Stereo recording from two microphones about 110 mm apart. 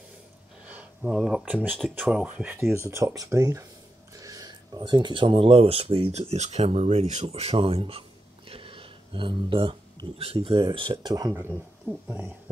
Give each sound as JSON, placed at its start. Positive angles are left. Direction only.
{"t": 0.7, "sound": "speech", "side_deg": -10}
{"t": 6.1, "sound": "speech", "side_deg": -90}
{"t": 12.1, "sound": "speech", "side_deg": -15}